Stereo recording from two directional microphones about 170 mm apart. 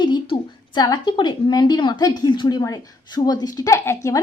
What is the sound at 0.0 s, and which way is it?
A woman's voice, 25° left (ahead or behind).